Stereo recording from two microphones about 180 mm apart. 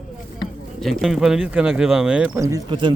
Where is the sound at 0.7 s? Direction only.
Centre (ahead or behind).